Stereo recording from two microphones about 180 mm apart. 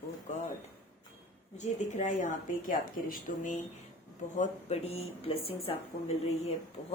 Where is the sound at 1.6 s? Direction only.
40° left (ahead or behind).